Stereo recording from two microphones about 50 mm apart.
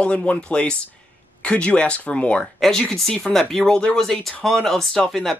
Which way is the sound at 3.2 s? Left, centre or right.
Centre.